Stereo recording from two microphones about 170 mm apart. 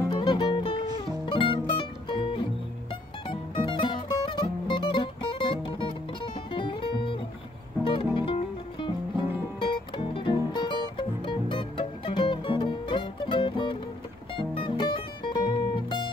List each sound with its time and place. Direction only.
0.1 s music: 25° left (ahead or behind)